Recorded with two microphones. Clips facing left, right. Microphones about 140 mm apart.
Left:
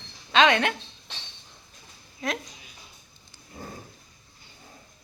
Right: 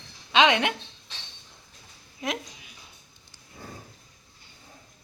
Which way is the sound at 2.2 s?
15° right (ahead or behind).